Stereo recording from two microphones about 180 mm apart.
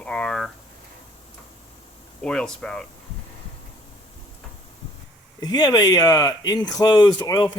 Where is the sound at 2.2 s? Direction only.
5° left (ahead or behind).